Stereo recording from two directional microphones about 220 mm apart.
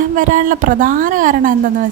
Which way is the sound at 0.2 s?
35° right (ahead or behind).